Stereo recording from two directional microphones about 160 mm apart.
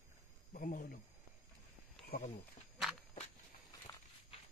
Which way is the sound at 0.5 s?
60° left (ahead or behind).